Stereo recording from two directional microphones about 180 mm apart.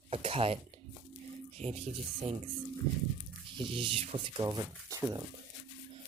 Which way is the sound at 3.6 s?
30° right (ahead or behind).